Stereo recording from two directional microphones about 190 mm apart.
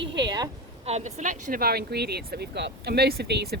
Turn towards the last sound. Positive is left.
turn(degrees=-60)  # may be behind; listen again after turning